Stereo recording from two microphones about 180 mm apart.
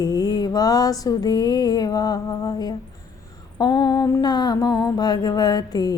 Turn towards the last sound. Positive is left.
turn(degrees=20)  # may be behind; listen again after turning